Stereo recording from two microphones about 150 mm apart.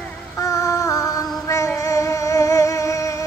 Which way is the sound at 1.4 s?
20° left (ahead or behind).